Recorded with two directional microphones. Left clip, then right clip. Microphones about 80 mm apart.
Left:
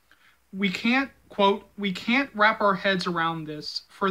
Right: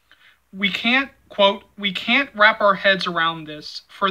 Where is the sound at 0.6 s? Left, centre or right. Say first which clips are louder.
Right 6 dB; left.